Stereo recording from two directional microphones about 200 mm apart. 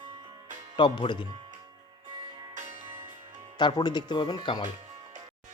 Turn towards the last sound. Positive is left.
turn(degrees=20)  # may be behind; listen again after turning